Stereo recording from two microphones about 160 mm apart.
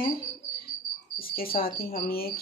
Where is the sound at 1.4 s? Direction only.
65° left (ahead or behind).